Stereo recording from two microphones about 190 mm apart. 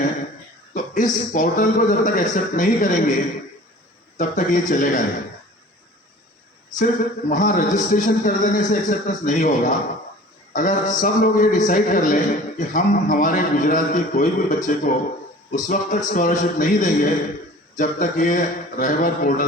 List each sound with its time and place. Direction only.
0.7 s a man's voice: 45° left (ahead or behind)
4.2 s a man's voice: 40° left (ahead or behind)
7.3 s a man's voice: 45° left (ahead or behind)